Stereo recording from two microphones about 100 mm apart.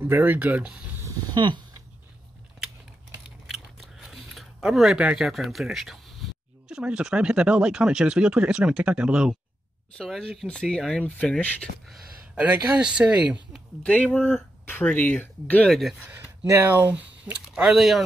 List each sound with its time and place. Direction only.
0.0 s speech: 20° right (ahead or behind)
1.3 s speech: 50° right (ahead or behind)
3.4 s chewing: centre (ahead or behind)
6.7 s speech: 10° right (ahead or behind)
9.9 s speech: centre (ahead or behind)
12.8 s speech: 10° right (ahead or behind)
13.8 s speech: 10° left (ahead or behind)
15.7 s speech: centre (ahead or behind)
16.0 s speech: 15° right (ahead or behind)